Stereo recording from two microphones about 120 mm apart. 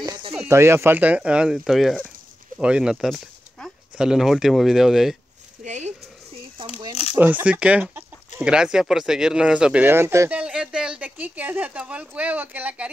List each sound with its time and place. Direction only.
0.5 s speech: 20° right (ahead or behind); by 5.1 s 5° right (ahead or behind)
5.6 s speech: 75° right (ahead or behind)
7.2 s speech: 15° right (ahead or behind)
10.3 s speech: 10° right (ahead or behind)